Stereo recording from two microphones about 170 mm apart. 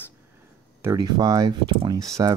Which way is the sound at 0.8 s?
20° right (ahead or behind).